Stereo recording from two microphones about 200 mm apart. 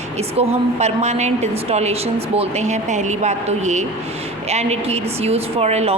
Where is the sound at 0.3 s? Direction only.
35° right (ahead or behind).